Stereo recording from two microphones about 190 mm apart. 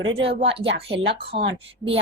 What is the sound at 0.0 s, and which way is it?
Speech, 70° right (ahead or behind).